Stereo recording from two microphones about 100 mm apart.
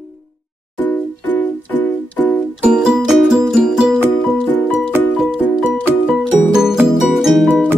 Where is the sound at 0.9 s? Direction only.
15° left (ahead or behind).